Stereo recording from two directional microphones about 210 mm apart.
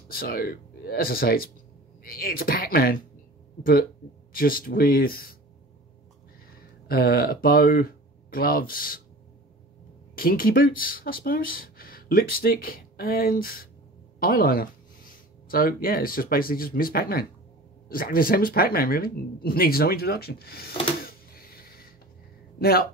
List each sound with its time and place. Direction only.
0.1 s speech: 45° left (ahead or behind)
4.3 s speech: 45° left (ahead or behind)
6.9 s speech: 45° left (ahead or behind)
10.1 s speech: 45° left (ahead or behind)
21.0 s a sound: 45° left (ahead or behind)
22.6 s speech: 45° left (ahead or behind)